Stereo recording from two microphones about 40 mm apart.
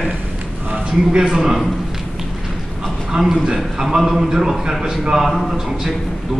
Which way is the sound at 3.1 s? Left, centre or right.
Right.